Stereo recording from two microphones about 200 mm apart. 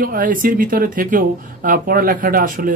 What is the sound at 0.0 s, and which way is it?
Speech, 45° right (ahead or behind).